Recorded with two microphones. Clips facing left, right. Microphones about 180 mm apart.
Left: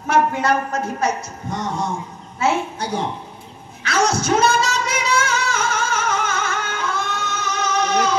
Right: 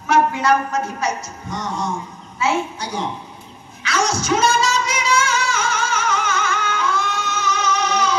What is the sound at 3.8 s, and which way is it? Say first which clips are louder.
Singing: left 2 dB; 55° left (ahead or behind).